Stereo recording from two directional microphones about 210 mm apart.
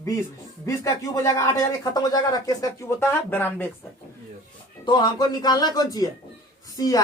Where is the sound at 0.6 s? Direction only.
15° left (ahead or behind).